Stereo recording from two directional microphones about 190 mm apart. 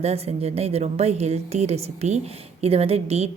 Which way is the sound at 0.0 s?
35° right (ahead or behind).